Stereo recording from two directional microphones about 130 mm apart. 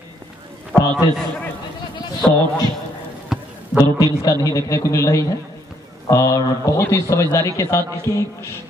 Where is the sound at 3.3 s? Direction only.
5° right (ahead or behind).